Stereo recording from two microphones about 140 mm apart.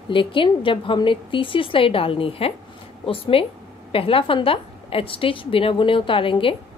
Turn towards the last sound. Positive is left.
turn(degrees=40)  # may be behind; listen again after turning